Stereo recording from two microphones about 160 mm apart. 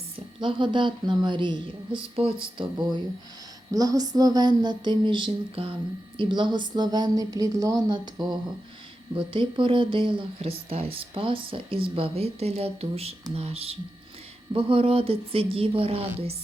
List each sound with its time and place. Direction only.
0.3 s a woman's voice: 30° right (ahead or behind)